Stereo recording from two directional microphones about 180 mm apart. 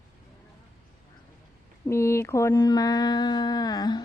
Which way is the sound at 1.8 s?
15° left (ahead or behind).